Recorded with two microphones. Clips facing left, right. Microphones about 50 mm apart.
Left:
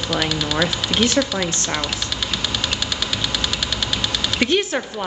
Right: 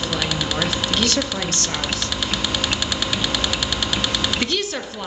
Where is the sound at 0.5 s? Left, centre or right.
Left.